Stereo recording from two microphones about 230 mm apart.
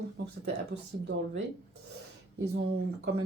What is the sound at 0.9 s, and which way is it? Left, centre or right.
Speech, right.